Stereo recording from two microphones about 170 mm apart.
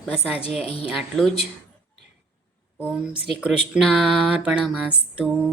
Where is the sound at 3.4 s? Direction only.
5° right (ahead or behind).